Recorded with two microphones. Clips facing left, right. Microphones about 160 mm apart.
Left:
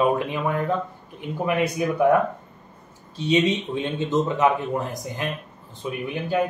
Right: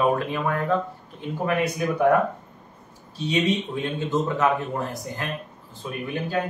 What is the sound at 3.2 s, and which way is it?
Speech, 20° left (ahead or behind).